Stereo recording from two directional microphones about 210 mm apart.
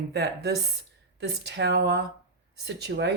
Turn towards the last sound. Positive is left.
turn(degrees=-55)  # may be behind; listen again after turning